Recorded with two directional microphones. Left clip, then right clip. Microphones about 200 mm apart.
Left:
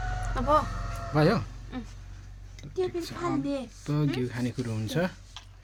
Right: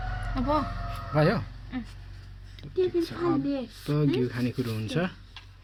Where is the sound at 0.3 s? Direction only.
45° left (ahead or behind).